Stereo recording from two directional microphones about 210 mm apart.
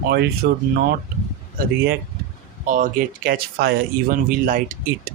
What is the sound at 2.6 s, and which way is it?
Speech, 40° right (ahead or behind).